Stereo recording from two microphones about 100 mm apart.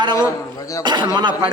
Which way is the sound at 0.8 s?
45° right (ahead or behind).